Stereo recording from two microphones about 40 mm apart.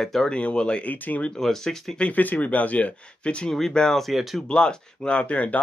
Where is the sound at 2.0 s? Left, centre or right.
Left.